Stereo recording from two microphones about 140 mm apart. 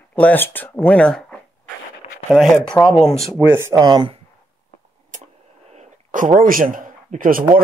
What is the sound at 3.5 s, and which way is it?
Speech, 20° right (ahead or behind).